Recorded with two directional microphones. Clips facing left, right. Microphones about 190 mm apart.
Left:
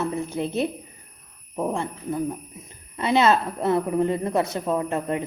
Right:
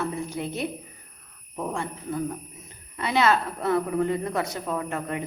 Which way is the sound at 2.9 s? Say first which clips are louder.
Left 3 dB; 25° left (ahead or behind).